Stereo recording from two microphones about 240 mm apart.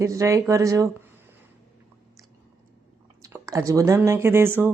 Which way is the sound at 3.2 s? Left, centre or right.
Centre.